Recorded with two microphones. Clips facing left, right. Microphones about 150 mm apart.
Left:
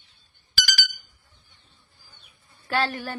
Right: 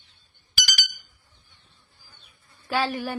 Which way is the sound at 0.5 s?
15° right (ahead or behind).